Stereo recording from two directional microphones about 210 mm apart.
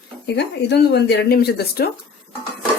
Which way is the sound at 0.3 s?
50° left (ahead or behind).